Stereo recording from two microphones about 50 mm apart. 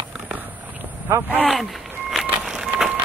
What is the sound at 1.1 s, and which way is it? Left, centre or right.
Speech, right.